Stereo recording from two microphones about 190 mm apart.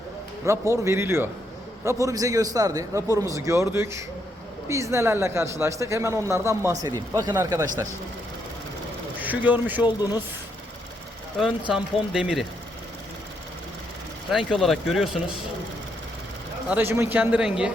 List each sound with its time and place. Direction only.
0.7 s speech: 15° right (ahead or behind)
9.2 s speech: 10° right (ahead or behind)
11.7 s speech: centre (ahead or behind)
14.3 s speech: centre (ahead or behind)
16.6 s speech: 10° right (ahead or behind)